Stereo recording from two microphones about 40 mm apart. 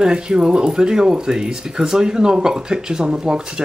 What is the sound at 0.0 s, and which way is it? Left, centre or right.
Speech, centre.